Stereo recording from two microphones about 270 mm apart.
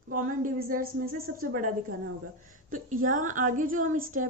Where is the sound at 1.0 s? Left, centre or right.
Right.